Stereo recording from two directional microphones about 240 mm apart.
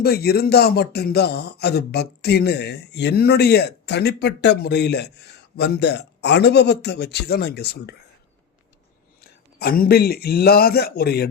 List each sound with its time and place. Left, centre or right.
0.0 s speech: left
9.2 s speech: left